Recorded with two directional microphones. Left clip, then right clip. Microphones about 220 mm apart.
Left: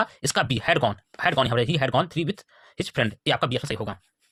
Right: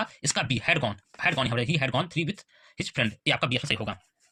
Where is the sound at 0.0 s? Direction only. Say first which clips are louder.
Left 5 dB; 50° left (ahead or behind).